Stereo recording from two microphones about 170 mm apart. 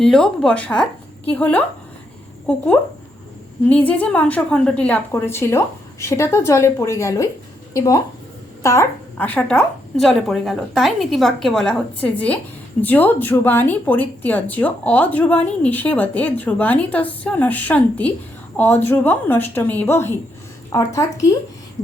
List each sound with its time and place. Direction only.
0.0 s a woman's voice: 5° left (ahead or behind)
3.7 s a woman's voice: 10° left (ahead or behind)